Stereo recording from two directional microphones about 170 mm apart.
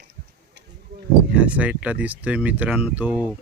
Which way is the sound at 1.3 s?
5° right (ahead or behind).